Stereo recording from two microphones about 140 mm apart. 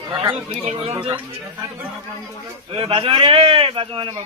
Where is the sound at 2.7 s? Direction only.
40° right (ahead or behind).